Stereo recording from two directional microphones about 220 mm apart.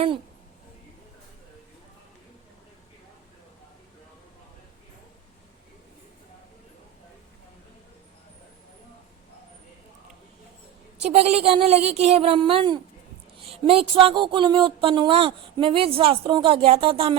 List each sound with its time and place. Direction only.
11.0 s speech: 30° right (ahead or behind)